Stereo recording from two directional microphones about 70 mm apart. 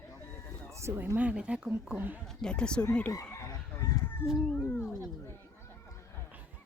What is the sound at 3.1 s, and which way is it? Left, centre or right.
Chicken, left.